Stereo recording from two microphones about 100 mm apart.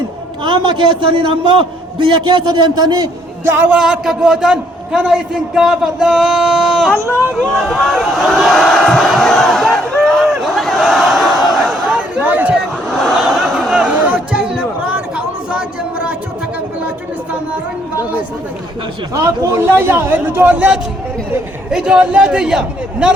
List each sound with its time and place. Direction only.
0.4 s a man's voice: 55° right (ahead or behind)
3.5 s a man's voice: 10° right (ahead or behind)
10.0 s battle cry: centre (ahead or behind)
11.9 s a sound: 15° right (ahead or behind)
12.9 s a sound: centre (ahead or behind)
19.1 s a man's voice: 30° right (ahead or behind); by 23.1 s 10° right (ahead or behind)